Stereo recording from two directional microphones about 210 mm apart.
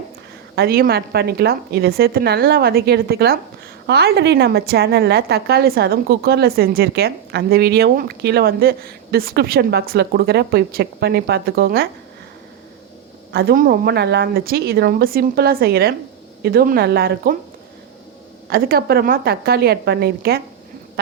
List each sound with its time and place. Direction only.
0.5 s a woman's voice: 45° right (ahead or behind)
13.3 s a woman's voice: 50° right (ahead or behind)
18.4 s a woman's voice: 45° right (ahead or behind)